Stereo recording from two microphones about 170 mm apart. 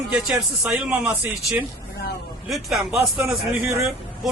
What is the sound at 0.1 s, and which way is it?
Speech, 5° right (ahead or behind).